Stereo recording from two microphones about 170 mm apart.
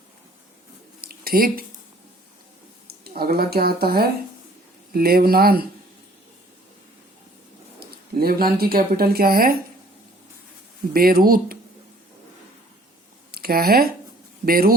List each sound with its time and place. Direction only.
1.0 s a sound: 60° right (ahead or behind)
2.8 s speech: 65° right (ahead or behind)
7.8 s speech: 65° right (ahead or behind)
10.9 s speech: 60° right (ahead or behind)
13.3 s speech: 60° right (ahead or behind)